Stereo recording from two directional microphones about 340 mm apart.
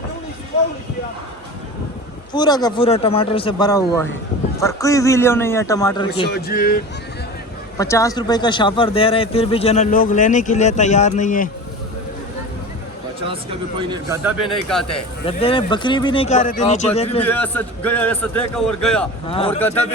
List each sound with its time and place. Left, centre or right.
2.3 s a man's voice: centre
6.2 s speech: left
7.8 s a man's voice: centre
13.2 s a man's voice: centre
15.3 s a man's voice: centre
17.2 s a man's voice: centre